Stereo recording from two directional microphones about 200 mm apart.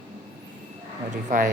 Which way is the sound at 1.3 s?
40° right (ahead or behind).